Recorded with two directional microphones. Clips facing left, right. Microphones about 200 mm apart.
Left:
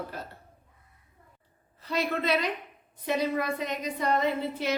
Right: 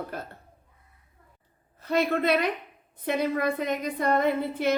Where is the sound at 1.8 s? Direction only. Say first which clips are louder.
Right 5 dB; 50° right (ahead or behind).